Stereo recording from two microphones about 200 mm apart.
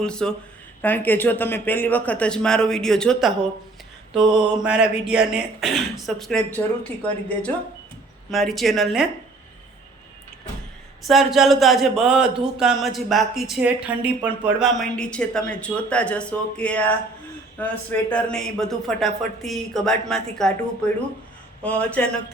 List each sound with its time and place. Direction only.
0.0 s speech: 5° left (ahead or behind)
4.2 s mantra: 25° right (ahead or behind)
4.6 s speech: 5° right (ahead or behind)
11.0 s speech: centre (ahead or behind)